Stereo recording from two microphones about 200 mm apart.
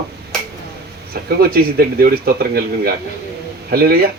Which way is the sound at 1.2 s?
50° right (ahead or behind).